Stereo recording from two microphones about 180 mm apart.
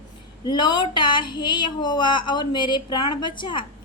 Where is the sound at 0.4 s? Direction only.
25° left (ahead or behind).